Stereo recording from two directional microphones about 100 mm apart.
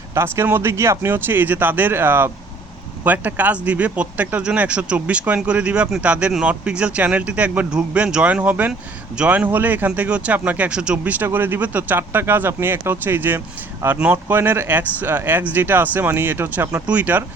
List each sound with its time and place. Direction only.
0.1 s speech: 25° right (ahead or behind)